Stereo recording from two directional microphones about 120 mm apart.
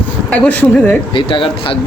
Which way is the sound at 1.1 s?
45° left (ahead or behind).